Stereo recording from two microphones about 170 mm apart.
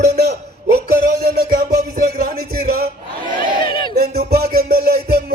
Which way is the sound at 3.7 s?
30° left (ahead or behind).